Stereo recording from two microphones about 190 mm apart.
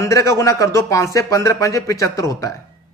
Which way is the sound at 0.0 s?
15° left (ahead or behind).